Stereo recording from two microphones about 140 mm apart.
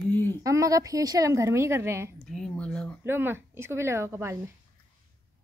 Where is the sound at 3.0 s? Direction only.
15° right (ahead or behind).